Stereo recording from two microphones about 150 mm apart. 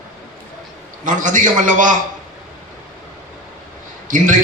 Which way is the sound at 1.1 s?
60° right (ahead or behind).